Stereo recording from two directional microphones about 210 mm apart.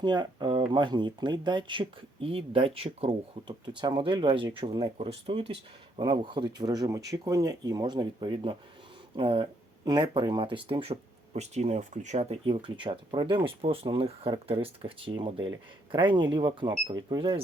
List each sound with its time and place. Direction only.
0.0 s speech: 20° right (ahead or behind)